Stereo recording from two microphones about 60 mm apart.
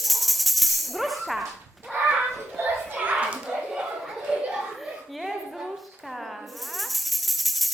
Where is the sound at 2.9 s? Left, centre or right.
Right.